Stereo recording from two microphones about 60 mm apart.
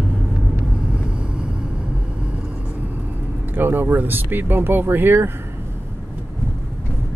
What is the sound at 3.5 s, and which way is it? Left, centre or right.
Speech, right.